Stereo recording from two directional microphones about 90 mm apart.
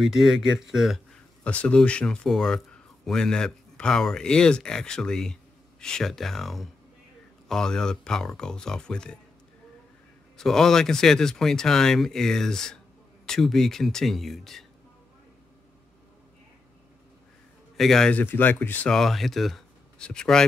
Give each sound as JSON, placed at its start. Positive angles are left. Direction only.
{"t": 0.0, "sound": "speech", "side_deg": -5}
{"t": 1.1, "sound": "speech", "side_deg": 15}
{"t": 10.3, "sound": "speech", "side_deg": 5}
{"t": 17.7, "sound": "speech", "side_deg": 5}
{"t": 18.1, "sound": "speech", "side_deg": 20}
{"t": 18.9, "sound": "speech", "side_deg": 5}